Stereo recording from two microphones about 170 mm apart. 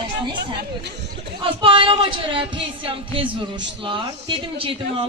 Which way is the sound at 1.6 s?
30° right (ahead or behind).